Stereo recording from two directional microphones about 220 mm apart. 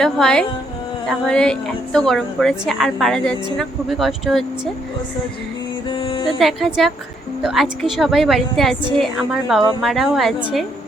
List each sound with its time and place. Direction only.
0.0 s a woman's voice: centre (ahead or behind)
5.9 s music: 25° left (ahead or behind)
6.4 s a woman's voice: centre (ahead or behind)